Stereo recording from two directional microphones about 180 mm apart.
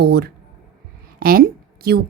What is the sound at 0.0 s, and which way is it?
A woman's voice, 65° right (ahead or behind).